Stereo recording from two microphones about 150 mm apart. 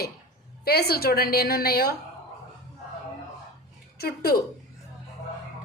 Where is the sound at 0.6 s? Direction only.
90° left.